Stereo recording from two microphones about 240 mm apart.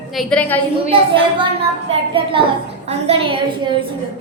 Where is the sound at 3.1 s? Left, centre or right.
Right.